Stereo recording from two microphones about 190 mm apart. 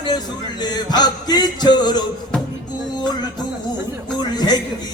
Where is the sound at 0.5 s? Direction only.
20° left (ahead or behind).